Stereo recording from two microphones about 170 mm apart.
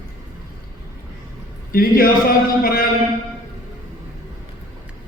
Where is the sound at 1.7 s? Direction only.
60° left (ahead or behind).